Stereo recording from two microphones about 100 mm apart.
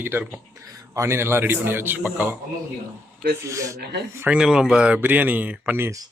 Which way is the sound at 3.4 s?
30° right (ahead or behind).